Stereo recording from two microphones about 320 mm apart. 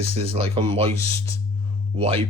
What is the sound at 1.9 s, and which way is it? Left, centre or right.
Speech, centre.